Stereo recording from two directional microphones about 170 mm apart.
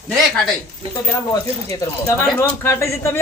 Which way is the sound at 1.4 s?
20° left (ahead or behind).